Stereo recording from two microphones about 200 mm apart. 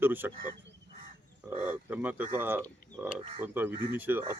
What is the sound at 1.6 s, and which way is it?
Speech, 10° right (ahead or behind).